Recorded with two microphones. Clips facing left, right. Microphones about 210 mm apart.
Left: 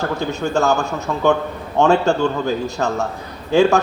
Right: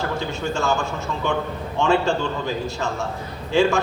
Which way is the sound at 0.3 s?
45° left (ahead or behind).